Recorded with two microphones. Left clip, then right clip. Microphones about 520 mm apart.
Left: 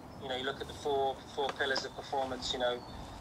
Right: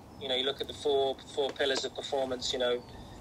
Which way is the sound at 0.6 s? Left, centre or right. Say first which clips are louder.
Right 4 dB; right.